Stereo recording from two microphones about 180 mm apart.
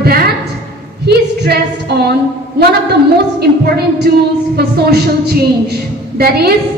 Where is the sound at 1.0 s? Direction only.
65° right (ahead or behind).